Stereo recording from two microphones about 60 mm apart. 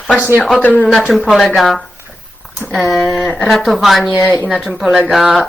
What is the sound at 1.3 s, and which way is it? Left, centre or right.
Speech, centre.